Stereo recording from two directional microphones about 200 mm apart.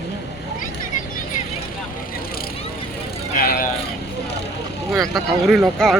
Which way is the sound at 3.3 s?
50° left (ahead or behind).